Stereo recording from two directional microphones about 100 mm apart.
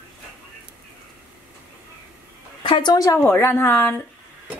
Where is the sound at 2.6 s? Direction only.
50° left (ahead or behind).